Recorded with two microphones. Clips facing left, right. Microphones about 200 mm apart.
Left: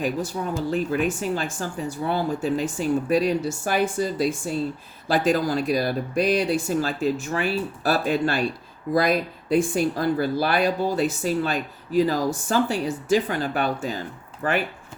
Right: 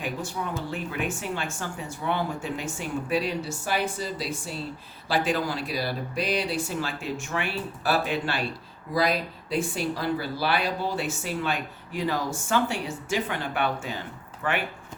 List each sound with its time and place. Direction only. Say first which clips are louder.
0.7 s speech: left 7 dB; 40° left (ahead or behind)